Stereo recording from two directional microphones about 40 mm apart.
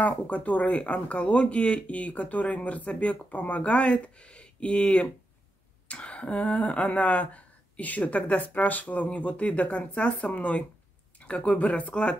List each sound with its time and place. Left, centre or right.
0.0 s speech: left
5.9 s a sound: left
6.9 s speech: left